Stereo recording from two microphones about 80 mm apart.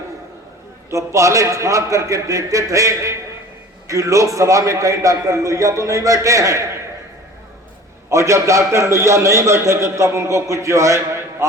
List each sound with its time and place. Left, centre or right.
0.9 s a man's voice: right
8.1 s a man's voice: right